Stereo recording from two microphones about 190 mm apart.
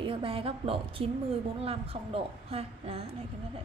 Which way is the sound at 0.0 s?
30° right (ahead or behind).